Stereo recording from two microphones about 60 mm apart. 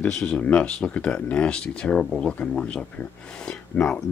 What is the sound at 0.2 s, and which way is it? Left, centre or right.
Speech, centre.